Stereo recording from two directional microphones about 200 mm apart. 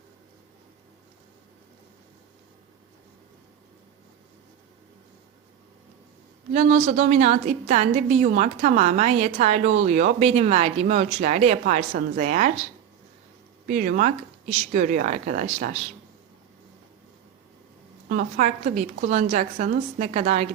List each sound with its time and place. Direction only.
6.5 s a woman's voice: 40° right (ahead or behind)
13.7 s a woman's voice: 40° right (ahead or behind)
18.1 s a woman's voice: 40° right (ahead or behind)